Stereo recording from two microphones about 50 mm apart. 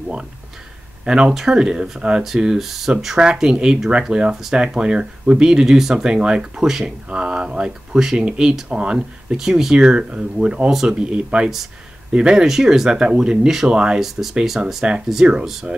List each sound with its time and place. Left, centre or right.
1.0 s speech: centre
6.0 s speech: centre
7.1 s speech: centre
12.4 s speech: centre
14.3 s speech: centre
14.8 s speech: centre